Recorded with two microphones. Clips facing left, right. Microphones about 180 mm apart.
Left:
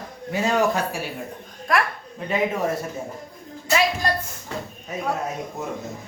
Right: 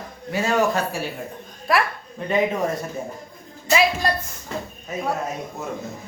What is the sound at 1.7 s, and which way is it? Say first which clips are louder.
Speech: right 1 dB; 5° right (ahead or behind).